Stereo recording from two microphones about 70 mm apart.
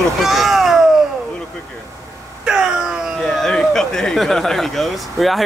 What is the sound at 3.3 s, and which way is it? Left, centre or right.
Speech, centre.